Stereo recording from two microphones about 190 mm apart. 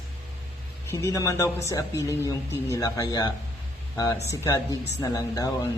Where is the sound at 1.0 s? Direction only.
15° left (ahead or behind).